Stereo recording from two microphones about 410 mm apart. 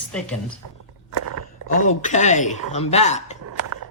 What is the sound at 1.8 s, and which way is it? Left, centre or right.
Speech, centre.